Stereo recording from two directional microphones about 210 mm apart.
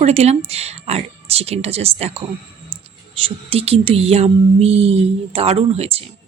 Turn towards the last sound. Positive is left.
turn(degrees=-25)  # may be behind; listen again after turning